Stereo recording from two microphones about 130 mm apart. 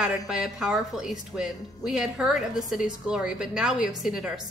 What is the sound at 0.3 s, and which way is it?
A woman's voice, 5° right (ahead or behind).